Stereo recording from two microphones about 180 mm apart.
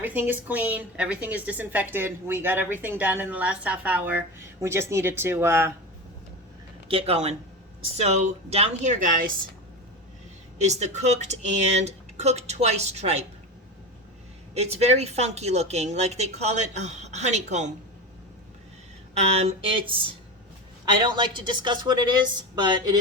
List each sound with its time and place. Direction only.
0.0 s a woman's voice: 10° right (ahead or behind)
6.8 s speech: 30° right (ahead or behind)
10.6 s speech: 40° right (ahead or behind)
14.5 s speech: 35° right (ahead or behind)
19.1 s a woman's voice: 35° right (ahead or behind)